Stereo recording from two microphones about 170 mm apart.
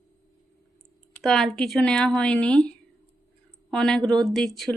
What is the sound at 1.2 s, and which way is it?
Speech, 5° left (ahead or behind).